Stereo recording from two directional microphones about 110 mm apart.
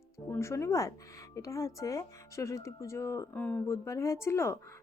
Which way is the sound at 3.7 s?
25° left (ahead or behind).